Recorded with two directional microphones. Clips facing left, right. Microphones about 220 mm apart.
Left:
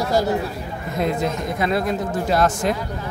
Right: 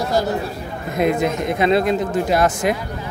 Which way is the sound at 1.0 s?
20° right (ahead or behind).